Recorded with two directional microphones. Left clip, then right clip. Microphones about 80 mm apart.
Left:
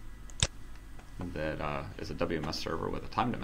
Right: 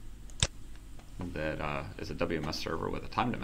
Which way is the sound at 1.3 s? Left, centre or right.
Centre.